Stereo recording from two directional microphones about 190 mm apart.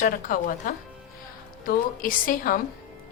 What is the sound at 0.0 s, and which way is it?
A woman's voice, 45° left (ahead or behind).